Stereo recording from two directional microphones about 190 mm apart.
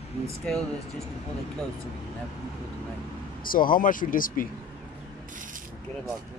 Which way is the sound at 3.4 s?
50° left (ahead or behind).